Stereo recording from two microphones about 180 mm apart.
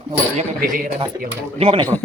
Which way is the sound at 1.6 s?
30° right (ahead or behind).